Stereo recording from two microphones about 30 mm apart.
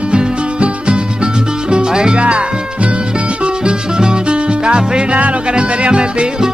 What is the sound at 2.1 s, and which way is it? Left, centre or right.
Music, right.